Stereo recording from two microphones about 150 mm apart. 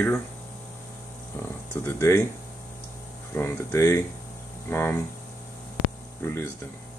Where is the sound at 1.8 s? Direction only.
15° left (ahead or behind).